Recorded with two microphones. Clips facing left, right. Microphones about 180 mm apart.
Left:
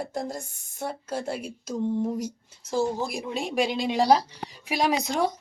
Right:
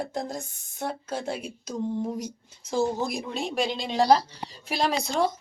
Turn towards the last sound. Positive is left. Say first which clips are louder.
# left 1 dB
turn(degrees=15)  # may be behind; listen again after turning